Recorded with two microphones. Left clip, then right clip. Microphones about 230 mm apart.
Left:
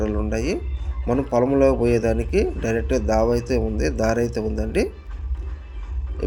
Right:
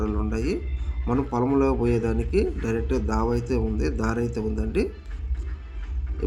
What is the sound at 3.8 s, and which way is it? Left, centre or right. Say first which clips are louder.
Speech: left 6 dB; right.